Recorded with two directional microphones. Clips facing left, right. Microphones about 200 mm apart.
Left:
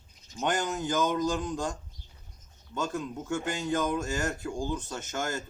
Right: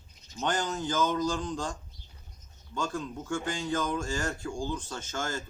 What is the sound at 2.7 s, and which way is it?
Speech, 20° left (ahead or behind).